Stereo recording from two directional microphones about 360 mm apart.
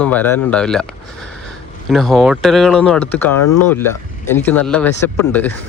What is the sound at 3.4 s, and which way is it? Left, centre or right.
Speech, left.